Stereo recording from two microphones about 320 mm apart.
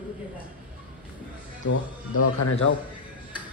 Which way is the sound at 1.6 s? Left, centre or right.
Left.